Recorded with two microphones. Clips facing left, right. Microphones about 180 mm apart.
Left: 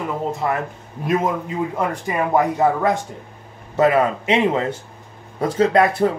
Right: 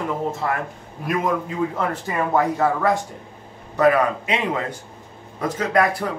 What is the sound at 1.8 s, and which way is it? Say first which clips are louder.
Speech: left 2 dB; 15° left (ahead or behind).